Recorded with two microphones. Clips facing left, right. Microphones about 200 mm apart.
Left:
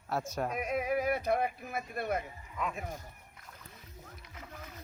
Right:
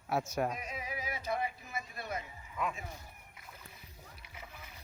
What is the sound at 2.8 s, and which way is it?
Speech, 50° left (ahead or behind).